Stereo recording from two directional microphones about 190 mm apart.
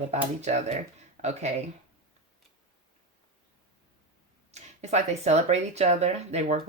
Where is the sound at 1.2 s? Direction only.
35° right (ahead or behind).